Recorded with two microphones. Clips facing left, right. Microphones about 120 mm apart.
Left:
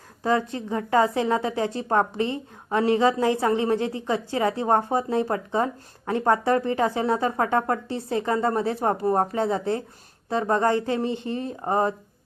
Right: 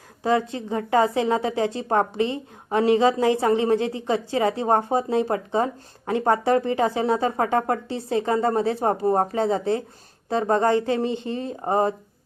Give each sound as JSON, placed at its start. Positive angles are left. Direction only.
{"t": 0.2, "sound": "a woman's voice", "side_deg": -20}